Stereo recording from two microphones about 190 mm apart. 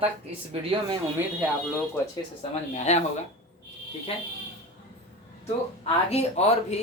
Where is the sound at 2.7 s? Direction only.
35° left (ahead or behind).